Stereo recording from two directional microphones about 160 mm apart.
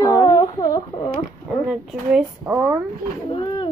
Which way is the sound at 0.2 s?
20° left (ahead or behind).